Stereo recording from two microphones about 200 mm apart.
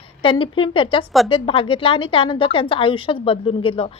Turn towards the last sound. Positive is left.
turn(degrees=25)  # may be behind; listen again after turning